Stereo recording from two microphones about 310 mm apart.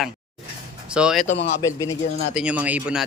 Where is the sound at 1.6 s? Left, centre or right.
Centre.